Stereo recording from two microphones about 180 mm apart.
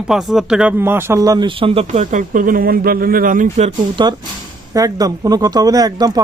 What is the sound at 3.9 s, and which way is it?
Speech, 25° right (ahead or behind).